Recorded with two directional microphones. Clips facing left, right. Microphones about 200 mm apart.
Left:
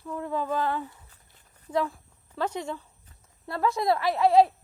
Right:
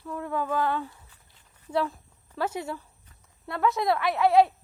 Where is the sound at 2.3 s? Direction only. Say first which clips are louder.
Even; 10° right (ahead or behind).